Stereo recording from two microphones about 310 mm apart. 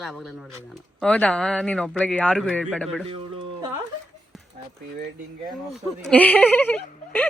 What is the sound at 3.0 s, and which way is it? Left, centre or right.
Speech, centre.